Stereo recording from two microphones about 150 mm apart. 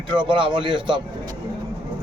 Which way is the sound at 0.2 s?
35° right (ahead or behind).